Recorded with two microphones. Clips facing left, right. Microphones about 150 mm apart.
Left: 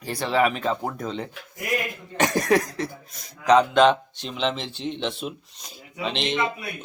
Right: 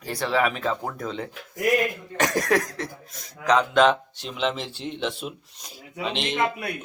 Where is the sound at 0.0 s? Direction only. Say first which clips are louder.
Left 2 dB; centre (ahead or behind).